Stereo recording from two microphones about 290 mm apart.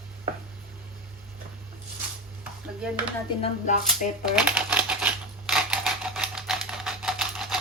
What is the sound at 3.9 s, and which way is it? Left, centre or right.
Shuffling cards, centre.